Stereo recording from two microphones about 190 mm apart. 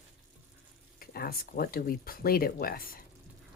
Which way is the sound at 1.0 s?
50° left (ahead or behind).